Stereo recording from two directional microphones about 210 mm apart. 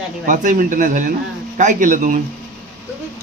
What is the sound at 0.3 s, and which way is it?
A man's voice, 40° right (ahead or behind).